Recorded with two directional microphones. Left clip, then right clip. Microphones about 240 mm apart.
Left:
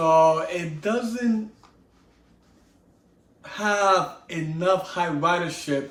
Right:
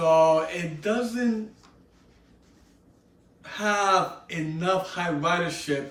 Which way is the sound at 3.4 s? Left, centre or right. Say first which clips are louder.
Left 3 dB; centre.